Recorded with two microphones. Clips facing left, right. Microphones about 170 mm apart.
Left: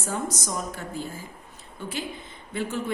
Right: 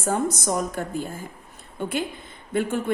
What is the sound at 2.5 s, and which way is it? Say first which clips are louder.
Speech: right 6 dB; 55° right (ahead or behind).